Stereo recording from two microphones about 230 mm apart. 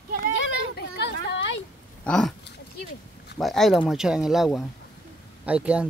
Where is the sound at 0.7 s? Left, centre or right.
Left.